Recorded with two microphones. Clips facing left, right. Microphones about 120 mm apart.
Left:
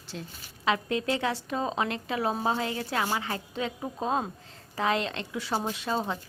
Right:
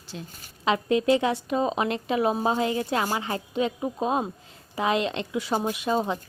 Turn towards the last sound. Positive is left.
turn(degrees=-15)  # may be behind; listen again after turning